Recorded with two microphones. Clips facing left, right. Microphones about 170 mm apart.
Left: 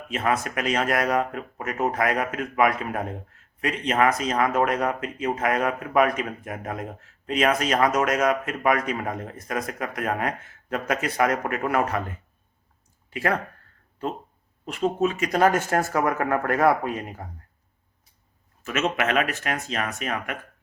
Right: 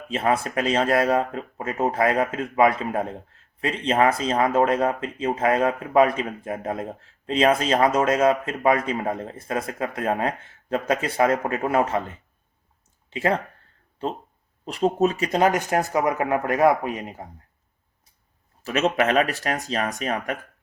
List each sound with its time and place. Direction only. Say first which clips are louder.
0.1 s speech: right 2 dB; 30° right (ahead or behind)
15.3 s speech: even; 20° right (ahead or behind)
18.6 s speech: right 4 dB; 35° right (ahead or behind)